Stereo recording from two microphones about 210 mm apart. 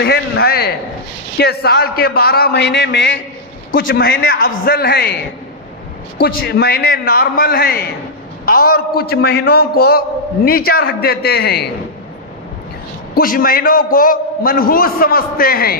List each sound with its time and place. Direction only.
0.0 s a man's voice: 50° left (ahead or behind)
3.9 s a man's voice: 45° left (ahead or behind)
6.1 s a man's voice: 50° left (ahead or behind)
13.1 s a man's voice: 45° left (ahead or behind)